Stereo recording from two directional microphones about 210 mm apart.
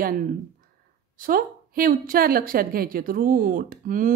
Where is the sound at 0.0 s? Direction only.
45° right (ahead or behind).